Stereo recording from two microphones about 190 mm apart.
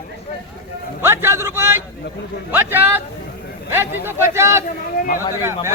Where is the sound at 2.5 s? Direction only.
10° right (ahead or behind).